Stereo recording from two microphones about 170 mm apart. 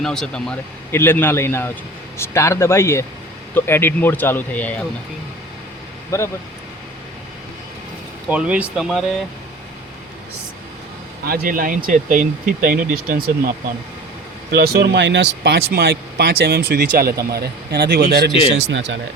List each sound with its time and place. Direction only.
0.0 s a man's voice: 5° left (ahead or behind)
8.3 s speech: 10° right (ahead or behind)
11.3 s speech: 60° right (ahead or behind)
14.5 s speech: 70° right (ahead or behind)
18.7 s speech: 90° right